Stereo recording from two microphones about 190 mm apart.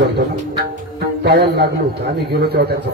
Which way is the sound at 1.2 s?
60° right (ahead or behind).